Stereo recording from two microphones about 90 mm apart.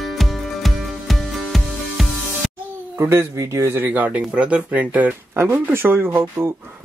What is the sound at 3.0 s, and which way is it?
Speech, 30° right (ahead or behind).